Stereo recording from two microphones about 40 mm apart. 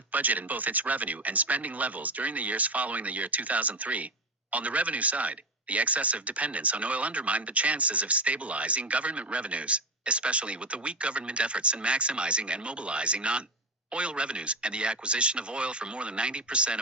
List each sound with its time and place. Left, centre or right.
0.1 s speech: right